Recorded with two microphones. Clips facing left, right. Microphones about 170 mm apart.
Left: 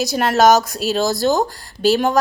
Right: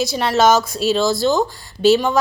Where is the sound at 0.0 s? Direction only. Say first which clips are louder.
Left 1 dB; 45° left (ahead or behind).